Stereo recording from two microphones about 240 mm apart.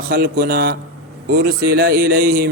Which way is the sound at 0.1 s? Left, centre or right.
Right.